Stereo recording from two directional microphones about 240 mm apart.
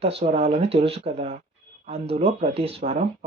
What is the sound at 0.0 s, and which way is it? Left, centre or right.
Speech, right.